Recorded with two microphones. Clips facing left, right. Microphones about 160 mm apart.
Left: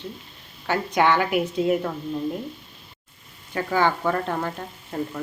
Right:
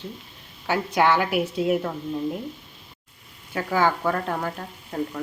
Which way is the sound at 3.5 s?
5° right (ahead or behind).